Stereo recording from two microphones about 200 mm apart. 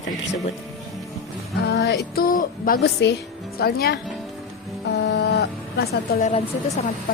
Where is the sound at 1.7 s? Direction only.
60° left (ahead or behind).